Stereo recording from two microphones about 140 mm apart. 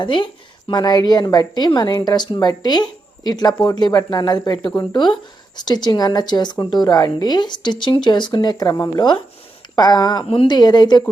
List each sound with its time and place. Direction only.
0.0 s a woman's voice: 35° left (ahead or behind)